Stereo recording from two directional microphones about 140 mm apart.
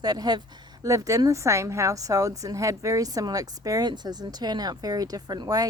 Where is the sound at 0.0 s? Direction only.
30° right (ahead or behind).